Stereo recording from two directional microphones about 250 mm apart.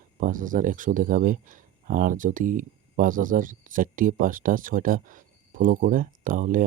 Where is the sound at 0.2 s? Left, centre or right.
Right.